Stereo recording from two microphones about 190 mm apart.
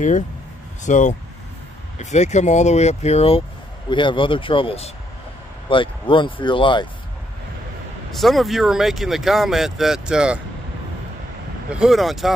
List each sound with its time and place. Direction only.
0.8 s speech: 40° left (ahead or behind)
8.1 s speech: centre (ahead or behind)
11.7 s speech: centre (ahead or behind)